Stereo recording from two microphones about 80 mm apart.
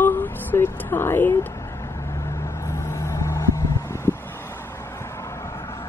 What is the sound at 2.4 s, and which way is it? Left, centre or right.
Vehicle, left.